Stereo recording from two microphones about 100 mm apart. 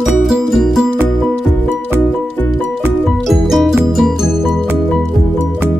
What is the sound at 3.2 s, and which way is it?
Music, centre (ahead or behind).